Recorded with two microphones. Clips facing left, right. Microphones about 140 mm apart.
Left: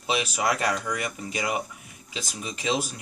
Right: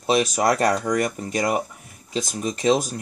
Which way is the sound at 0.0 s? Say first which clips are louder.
Right 7 dB; 40° right (ahead or behind).